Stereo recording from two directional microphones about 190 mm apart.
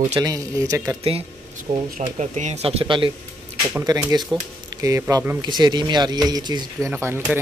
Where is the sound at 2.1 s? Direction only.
40° right (ahead or behind).